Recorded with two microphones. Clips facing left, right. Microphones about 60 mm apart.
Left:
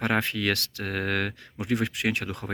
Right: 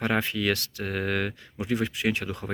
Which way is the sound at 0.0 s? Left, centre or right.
Left.